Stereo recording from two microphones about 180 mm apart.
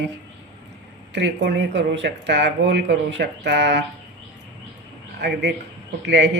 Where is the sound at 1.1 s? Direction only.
75° right (ahead or behind).